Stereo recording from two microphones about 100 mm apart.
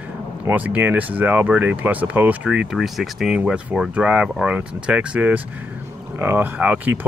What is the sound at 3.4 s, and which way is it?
Speech, 15° right (ahead or behind).